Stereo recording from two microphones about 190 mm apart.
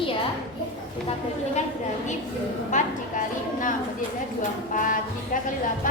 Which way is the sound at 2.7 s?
45° left (ahead or behind).